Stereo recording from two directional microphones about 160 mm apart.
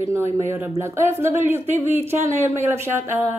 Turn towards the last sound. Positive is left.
turn(degrees=-15)  # may be behind; listen again after turning